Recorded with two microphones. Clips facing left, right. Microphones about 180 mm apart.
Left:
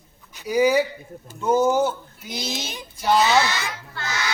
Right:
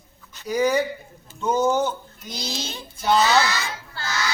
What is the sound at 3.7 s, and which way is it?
Child singing, 30° right (ahead or behind).